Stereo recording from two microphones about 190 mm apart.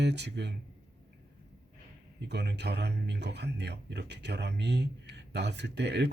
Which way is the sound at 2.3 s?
60° right (ahead or behind).